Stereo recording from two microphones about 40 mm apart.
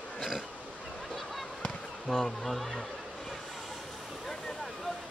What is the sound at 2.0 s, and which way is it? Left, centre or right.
Speech, centre.